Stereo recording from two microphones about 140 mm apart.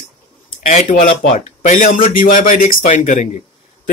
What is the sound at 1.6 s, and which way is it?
Speech, 75° left (ahead or behind).